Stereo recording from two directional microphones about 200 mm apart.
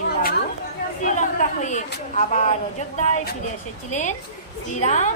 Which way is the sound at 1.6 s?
35° left (ahead or behind).